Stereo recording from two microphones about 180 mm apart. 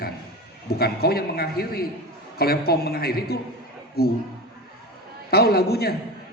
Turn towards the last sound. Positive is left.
turn(degrees=60)  # may be behind; listen again after turning